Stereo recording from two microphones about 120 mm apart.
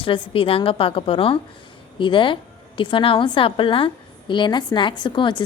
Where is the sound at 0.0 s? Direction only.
50° left (ahead or behind).